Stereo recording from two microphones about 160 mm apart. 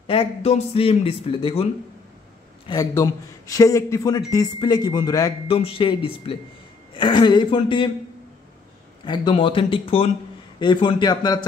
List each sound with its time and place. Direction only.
0.0 s speech: 35° left (ahead or behind)
2.8 s a man's voice: 20° left (ahead or behind)
5.5 s a man's voice: 35° left (ahead or behind)
9.0 s a man's voice: 30° left (ahead or behind)